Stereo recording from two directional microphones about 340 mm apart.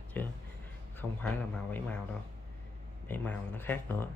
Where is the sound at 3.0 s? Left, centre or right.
Centre.